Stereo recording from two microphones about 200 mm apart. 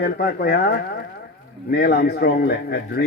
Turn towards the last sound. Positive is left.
turn(degrees=55)  # may be behind; listen again after turning